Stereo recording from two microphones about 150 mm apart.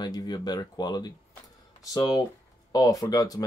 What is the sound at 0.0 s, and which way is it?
Speech, 25° left (ahead or behind).